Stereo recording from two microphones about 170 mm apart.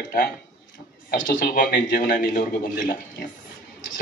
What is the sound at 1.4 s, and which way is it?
Speech, 60° left (ahead or behind).